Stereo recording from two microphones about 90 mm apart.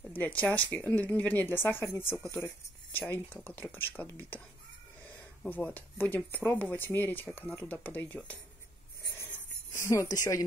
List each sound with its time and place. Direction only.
0.1 s speech: 15° left (ahead or behind)
5.5 s speech: 20° left (ahead or behind)
9.8 s speech: 35° left (ahead or behind)